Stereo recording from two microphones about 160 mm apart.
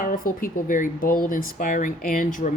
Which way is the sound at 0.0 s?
60° left (ahead or behind).